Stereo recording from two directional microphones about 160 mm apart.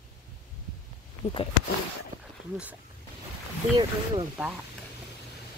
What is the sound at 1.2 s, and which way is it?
Speech, 45° left (ahead or behind).